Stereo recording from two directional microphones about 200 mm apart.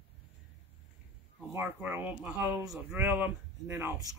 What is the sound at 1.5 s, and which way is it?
Speech, 10° right (ahead or behind).